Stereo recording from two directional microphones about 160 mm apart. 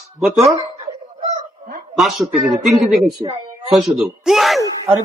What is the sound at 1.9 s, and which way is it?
Speech, 5° right (ahead or behind).